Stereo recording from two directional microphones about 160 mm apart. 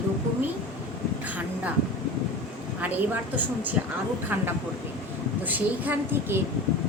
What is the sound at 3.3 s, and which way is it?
Speech, 10° right (ahead or behind).